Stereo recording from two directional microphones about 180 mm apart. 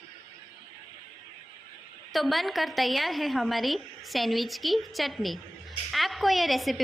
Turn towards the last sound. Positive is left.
turn(degrees=0)  # may be behind; listen again after turning